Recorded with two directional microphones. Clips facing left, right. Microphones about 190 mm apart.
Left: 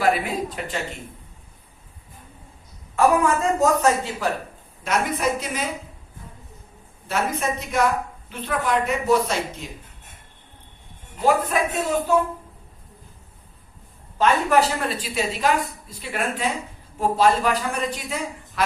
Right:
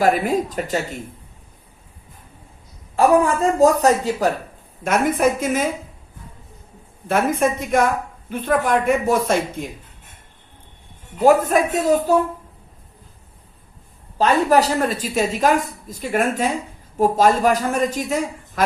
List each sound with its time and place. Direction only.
0.0 s a woman's voice: 45° right (ahead or behind)
2.9 s a woman's voice: 35° right (ahead or behind)
4.8 s a woman's voice: 50° right (ahead or behind)
7.1 s a woman's voice: 50° right (ahead or behind)
11.2 s a woman's voice: 45° right (ahead or behind)
14.2 s a woman's voice: 40° right (ahead or behind)